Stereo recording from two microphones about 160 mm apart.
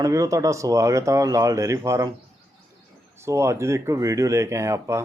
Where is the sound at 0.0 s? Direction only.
20° right (ahead or behind).